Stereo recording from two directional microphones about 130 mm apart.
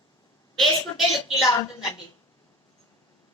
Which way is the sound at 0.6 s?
Centre (ahead or behind).